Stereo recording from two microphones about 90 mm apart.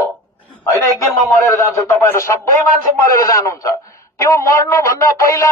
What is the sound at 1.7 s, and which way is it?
A man's voice, 30° left (ahead or behind).